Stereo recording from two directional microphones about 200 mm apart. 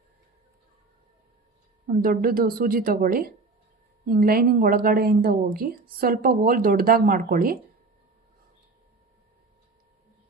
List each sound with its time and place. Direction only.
1.9 s a woman's voice: 45° right (ahead or behind)